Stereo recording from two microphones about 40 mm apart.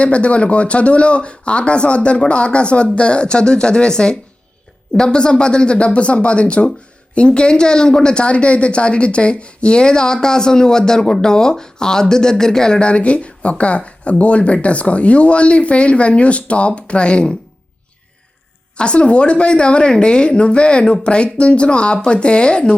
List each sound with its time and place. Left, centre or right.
0.0 s speech: left
18.8 s speech: left